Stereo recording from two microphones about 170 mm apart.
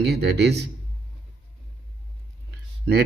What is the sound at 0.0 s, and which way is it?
Speech, 75° right (ahead or behind).